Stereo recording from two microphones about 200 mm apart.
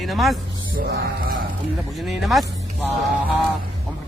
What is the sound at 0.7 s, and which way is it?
Music, 50° right (ahead or behind).